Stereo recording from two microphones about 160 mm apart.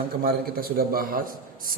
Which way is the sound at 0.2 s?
70° right (ahead or behind).